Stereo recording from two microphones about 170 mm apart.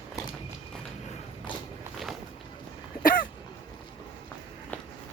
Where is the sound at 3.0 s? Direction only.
55° left (ahead or behind).